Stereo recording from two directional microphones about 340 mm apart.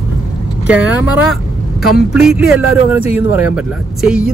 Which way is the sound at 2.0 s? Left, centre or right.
Centre.